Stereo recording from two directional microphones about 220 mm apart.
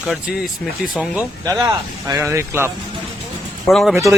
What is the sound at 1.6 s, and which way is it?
Speech, 15° right (ahead or behind).